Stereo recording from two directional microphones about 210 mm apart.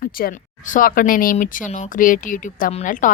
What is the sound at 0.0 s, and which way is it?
Speech, 45° left (ahead or behind).